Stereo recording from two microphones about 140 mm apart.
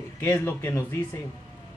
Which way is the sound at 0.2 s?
15° left (ahead or behind).